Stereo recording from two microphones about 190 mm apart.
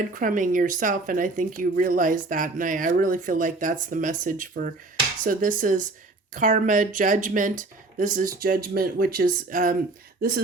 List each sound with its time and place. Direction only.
0.1 s speech: 45° right (ahead or behind)